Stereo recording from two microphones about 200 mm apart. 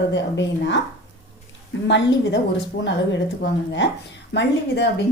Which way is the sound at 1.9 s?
60° left (ahead or behind).